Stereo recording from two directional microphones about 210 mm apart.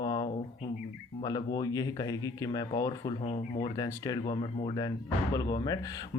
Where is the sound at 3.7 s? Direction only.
15° left (ahead or behind).